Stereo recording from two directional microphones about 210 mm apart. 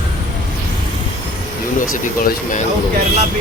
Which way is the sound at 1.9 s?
40° left (ahead or behind).